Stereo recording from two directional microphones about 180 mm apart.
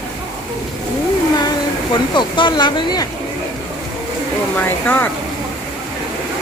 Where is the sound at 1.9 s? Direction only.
25° left (ahead or behind).